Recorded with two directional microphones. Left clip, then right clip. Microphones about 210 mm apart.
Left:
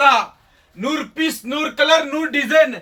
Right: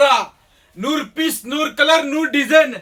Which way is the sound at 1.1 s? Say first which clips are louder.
Right 1 dB; 20° right (ahead or behind).